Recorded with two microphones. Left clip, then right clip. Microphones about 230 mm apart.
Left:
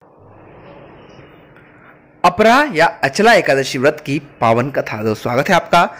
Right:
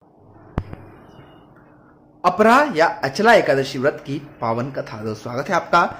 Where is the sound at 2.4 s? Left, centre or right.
Centre.